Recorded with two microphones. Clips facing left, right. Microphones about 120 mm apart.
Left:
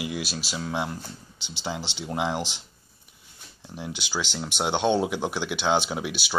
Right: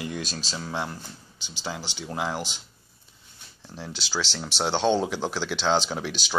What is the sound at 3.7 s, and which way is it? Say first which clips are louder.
Speech: even; 15° left (ahead or behind).